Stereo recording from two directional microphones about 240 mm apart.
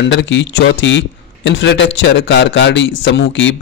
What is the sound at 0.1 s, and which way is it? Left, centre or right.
A man's voice, left.